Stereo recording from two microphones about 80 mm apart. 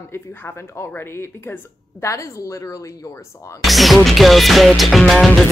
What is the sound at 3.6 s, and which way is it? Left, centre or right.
Music, centre.